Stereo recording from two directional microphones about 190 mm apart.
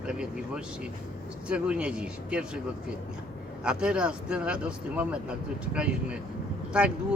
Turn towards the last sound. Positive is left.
turn(degrees=-5)  # may be behind; listen again after turning